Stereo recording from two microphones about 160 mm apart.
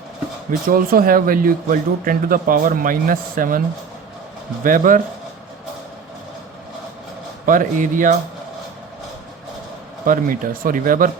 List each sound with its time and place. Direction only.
0.7 s speech: 60° right (ahead or behind)
4.6 s speech: 60° right (ahead or behind)
7.4 s speech: 55° right (ahead or behind)
10.1 s speech: 60° right (ahead or behind)